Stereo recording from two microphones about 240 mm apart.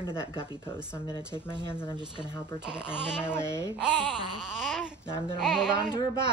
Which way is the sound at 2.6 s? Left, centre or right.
Centre.